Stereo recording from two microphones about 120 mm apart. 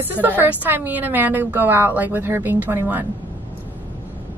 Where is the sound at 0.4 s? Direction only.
15° right (ahead or behind).